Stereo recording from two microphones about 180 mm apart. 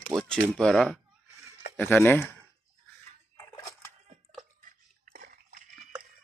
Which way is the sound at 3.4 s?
20° left (ahead or behind).